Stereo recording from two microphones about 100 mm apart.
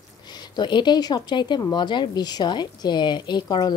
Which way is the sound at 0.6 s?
50° left (ahead or behind).